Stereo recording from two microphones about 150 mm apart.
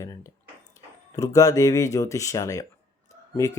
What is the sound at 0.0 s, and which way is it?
Speech, 20° left (ahead or behind).